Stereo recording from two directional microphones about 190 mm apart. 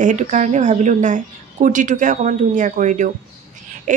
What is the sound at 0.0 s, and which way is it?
Speech, 40° right (ahead or behind).